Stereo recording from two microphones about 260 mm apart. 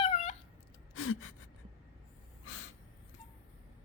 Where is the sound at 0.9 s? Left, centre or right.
Left.